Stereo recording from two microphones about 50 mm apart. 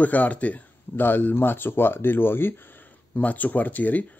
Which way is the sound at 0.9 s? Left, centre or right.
Left.